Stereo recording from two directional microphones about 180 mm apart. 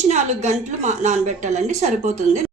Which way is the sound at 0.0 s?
40° right (ahead or behind).